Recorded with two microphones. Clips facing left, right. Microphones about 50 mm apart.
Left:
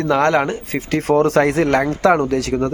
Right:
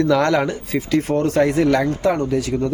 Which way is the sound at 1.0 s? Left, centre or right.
Left.